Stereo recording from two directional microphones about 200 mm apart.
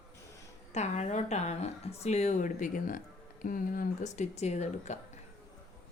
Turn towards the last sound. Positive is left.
turn(degrees=35)  # may be behind; listen again after turning